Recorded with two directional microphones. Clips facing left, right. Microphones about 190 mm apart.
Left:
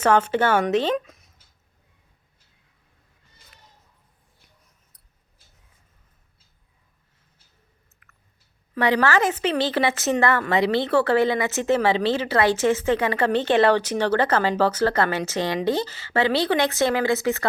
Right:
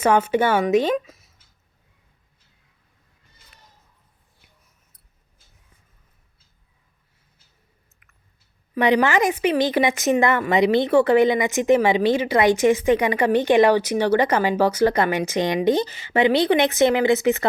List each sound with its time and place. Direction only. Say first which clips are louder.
0.0 s speech: right 1 dB; 10° right (ahead or behind)
8.0 s a sound: left 2 dB; 20° right (ahead or behind)
8.7 s speech: right 2 dB; 15° right (ahead or behind)